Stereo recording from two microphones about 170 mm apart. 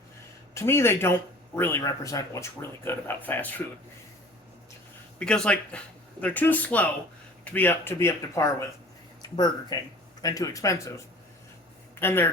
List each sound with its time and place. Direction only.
0.5 s speech: 15° left (ahead or behind)
5.2 s speech: 5° left (ahead or behind)